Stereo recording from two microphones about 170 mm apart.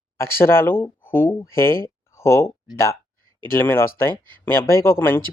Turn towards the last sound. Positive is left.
turn(degrees=15)  # may be behind; listen again after turning